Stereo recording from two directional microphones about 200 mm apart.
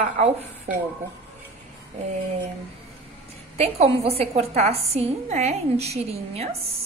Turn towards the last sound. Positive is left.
turn(degrees=-30)  # may be behind; listen again after turning